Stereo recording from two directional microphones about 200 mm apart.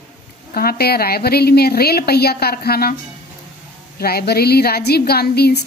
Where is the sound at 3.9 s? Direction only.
50° left (ahead or behind).